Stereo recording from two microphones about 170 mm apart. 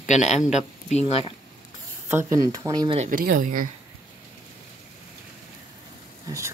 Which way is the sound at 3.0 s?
55° right (ahead or behind).